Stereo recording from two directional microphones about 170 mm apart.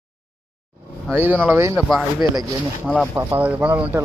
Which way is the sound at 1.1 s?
10° right (ahead or behind).